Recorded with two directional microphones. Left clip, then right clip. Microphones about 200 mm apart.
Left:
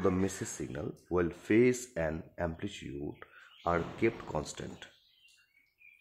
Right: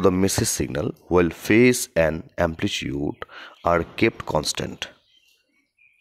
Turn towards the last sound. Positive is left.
turn(degrees=-40)  # may be behind; listen again after turning